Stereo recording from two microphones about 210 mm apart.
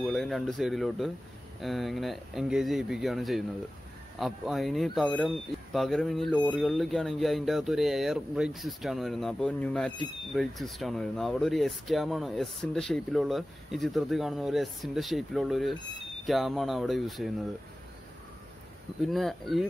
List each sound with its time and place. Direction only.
0.0 s speech: centre (ahead or behind)
19.0 s speech: centre (ahead or behind)